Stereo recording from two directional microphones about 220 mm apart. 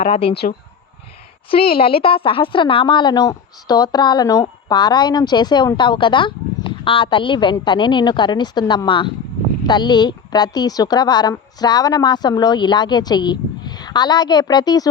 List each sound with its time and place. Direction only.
0.0 s speech: 25° left (ahead or behind)
1.8 s speech: 25° left (ahead or behind)